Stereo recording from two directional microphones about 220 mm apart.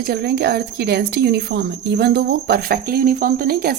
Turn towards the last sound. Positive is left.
turn(degrees=-45)  # may be behind; listen again after turning